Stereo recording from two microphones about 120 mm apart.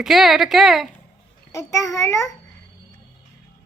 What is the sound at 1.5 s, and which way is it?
Speech, 25° left (ahead or behind).